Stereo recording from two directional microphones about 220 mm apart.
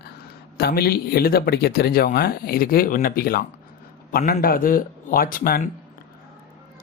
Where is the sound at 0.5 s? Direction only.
45° left (ahead or behind).